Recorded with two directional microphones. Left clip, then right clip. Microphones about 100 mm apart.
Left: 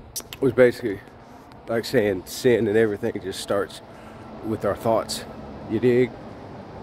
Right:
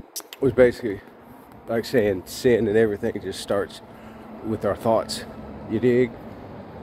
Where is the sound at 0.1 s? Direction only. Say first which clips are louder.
Even; 35° left (ahead or behind).